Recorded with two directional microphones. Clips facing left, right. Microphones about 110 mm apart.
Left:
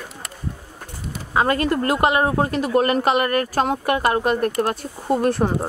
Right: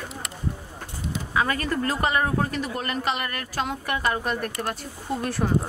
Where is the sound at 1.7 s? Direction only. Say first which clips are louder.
Left 6 dB; 60° left (ahead or behind).